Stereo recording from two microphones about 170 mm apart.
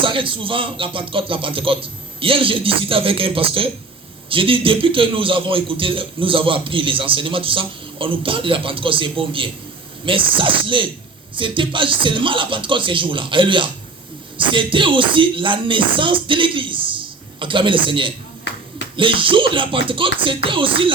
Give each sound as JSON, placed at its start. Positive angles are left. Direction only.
{"t": 0.0, "sound": "a man's voice", "side_deg": -30}